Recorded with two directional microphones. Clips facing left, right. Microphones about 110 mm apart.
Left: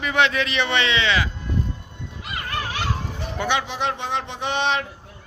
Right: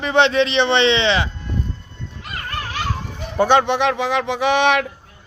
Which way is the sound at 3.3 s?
45° right (ahead or behind).